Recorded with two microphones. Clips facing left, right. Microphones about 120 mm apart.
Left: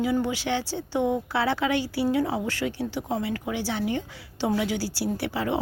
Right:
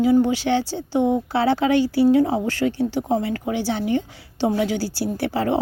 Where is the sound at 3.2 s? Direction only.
45° right (ahead or behind).